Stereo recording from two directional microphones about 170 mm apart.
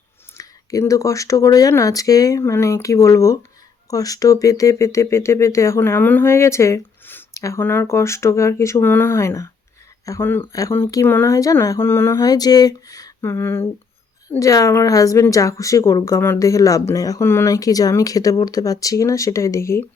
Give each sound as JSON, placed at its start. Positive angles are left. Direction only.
{"t": 0.3, "sound": "a woman's voice", "side_deg": 20}